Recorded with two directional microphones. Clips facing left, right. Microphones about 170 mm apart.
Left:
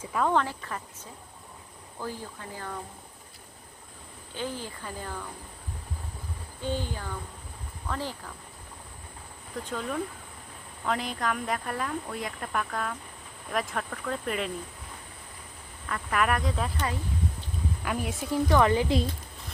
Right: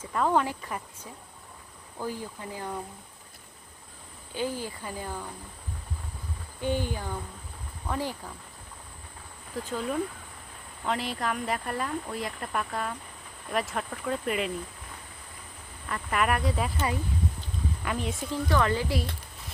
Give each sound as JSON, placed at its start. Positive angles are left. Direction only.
{"t": 0.0, "sound": "speech", "side_deg": 0}
{"t": 2.0, "sound": "speech", "side_deg": -15}
{"t": 4.4, "sound": "speech", "side_deg": -10}
{"t": 6.6, "sound": "speech", "side_deg": -15}
{"t": 9.6, "sound": "speech", "side_deg": -5}
{"t": 15.9, "sound": "speech", "side_deg": -5}
{"t": 17.8, "sound": "a woman's voice", "side_deg": 5}